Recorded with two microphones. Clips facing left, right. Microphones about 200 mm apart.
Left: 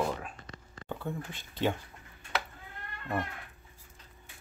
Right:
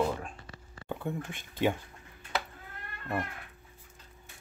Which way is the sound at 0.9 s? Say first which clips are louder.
Right 2 dB; 15° right (ahead or behind).